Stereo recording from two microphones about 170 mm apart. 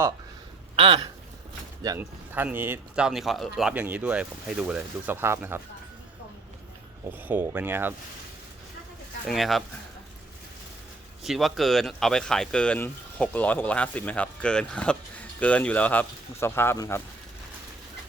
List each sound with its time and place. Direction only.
0.8 s a sound: 30° right (ahead or behind)
2.0 s speech: 10° right (ahead or behind)
7.2 s speech: 10° right (ahead or behind)
9.2 s speech: centre (ahead or behind)
11.2 s speech: centre (ahead or behind); by 17.0 s 20° left (ahead or behind)